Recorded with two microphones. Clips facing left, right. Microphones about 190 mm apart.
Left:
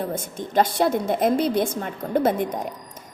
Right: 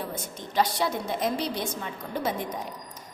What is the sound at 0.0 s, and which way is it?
A woman's voice, 50° left (ahead or behind).